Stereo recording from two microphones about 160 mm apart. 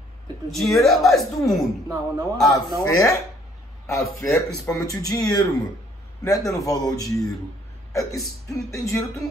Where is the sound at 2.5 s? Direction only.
20° left (ahead or behind).